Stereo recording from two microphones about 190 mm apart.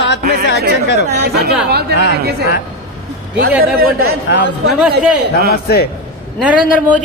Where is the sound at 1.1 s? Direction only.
65° right (ahead or behind).